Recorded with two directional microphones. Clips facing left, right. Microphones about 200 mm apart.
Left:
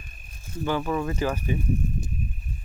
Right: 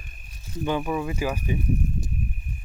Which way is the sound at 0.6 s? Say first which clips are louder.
Even; 15° right (ahead or behind).